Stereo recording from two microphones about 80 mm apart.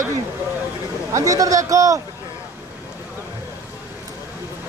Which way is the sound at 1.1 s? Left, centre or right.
Right.